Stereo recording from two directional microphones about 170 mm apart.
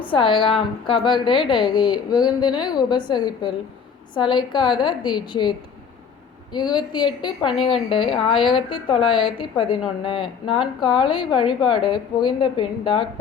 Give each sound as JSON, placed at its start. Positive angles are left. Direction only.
{"t": 0.0, "sound": "a woman's voice", "side_deg": 30}